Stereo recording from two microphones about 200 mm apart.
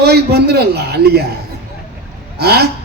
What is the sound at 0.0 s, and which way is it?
A man's voice, 55° right (ahead or behind).